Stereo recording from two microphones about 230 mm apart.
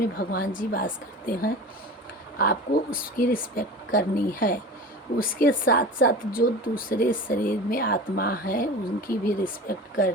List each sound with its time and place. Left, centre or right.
0.2 s speech: left